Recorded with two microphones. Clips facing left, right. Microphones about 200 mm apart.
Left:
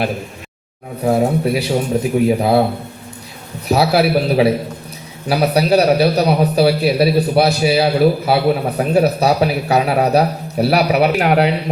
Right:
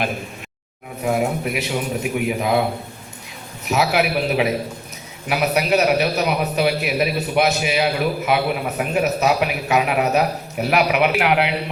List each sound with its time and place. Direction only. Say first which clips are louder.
1.0 s a man's voice: left 6 dB; 30° left (ahead or behind)
3.7 s a man's voice: left 5 dB; 35° left (ahead or behind)